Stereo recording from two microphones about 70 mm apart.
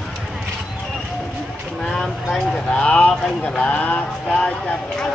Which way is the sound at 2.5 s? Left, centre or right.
Centre.